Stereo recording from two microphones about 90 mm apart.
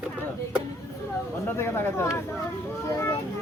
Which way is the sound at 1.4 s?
30° left (ahead or behind).